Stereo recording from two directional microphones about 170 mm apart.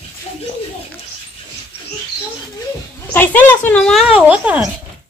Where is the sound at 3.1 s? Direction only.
10° left (ahead or behind); by 4.7 s 5° right (ahead or behind).